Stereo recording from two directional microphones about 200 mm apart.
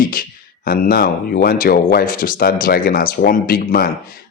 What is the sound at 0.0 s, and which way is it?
Speech, 45° left (ahead or behind).